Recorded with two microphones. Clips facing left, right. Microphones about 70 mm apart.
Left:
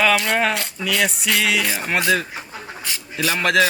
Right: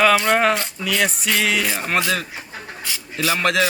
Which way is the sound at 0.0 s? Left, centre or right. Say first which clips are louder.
Right 3 dB; centre.